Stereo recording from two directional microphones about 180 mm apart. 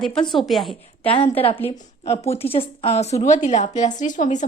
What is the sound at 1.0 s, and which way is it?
A woman's voice, 30° left (ahead or behind).